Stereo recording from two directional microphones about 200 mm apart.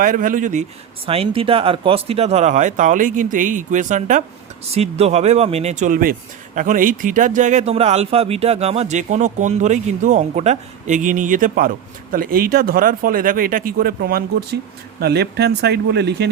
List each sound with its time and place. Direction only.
0.0 s speech: 45° right (ahead or behind)
1.0 s speech: 30° right (ahead or behind); by 16.3 s 55° right (ahead or behind)